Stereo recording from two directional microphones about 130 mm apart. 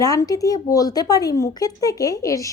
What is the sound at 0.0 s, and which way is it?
A woman's voice, 25° left (ahead or behind).